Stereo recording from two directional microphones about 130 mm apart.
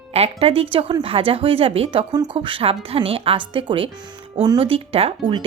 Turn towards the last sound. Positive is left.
turn(degrees=-45)  # may be behind; listen again after turning